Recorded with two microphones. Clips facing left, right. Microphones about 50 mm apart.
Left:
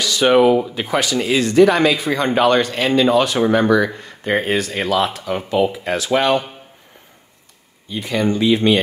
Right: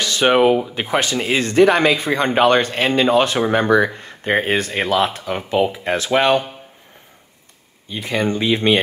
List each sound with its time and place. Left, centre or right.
0.0 s speech: right
7.9 s speech: right